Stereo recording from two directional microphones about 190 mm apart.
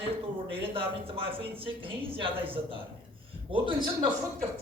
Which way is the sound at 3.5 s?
25° right (ahead or behind).